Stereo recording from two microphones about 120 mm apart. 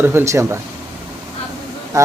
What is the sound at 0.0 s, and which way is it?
Speech, 20° right (ahead or behind).